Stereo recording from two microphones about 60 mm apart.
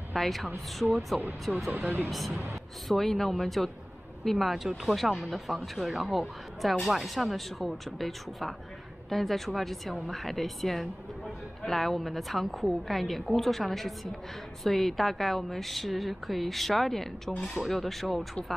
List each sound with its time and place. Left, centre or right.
0.1 s a woman's voice: centre
1.7 s speech: right
2.0 s speech: centre